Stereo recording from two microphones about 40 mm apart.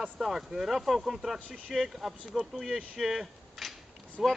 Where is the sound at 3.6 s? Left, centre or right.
Centre.